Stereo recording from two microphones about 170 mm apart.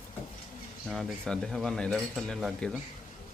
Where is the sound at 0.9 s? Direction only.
Centre (ahead or behind).